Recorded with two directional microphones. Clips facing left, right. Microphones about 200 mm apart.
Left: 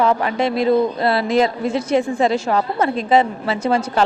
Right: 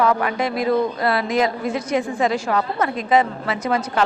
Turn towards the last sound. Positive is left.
turn(degrees=30)  # may be behind; listen again after turning